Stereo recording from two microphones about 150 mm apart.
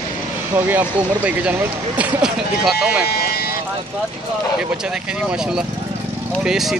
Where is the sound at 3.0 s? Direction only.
90° left.